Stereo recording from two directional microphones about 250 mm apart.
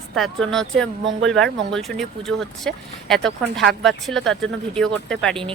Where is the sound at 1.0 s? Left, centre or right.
Right.